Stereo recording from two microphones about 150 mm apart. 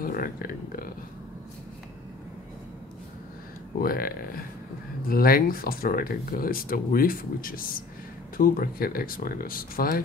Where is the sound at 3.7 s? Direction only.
80° left.